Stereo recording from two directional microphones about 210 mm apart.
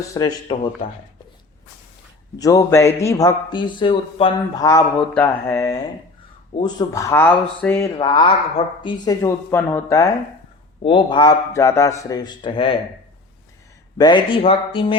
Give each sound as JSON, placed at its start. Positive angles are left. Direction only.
{"t": 0.0, "sound": "speech", "side_deg": 15}
{"t": 2.3, "sound": "a man's voice", "side_deg": 15}
{"t": 14.0, "sound": "a man's voice", "side_deg": 25}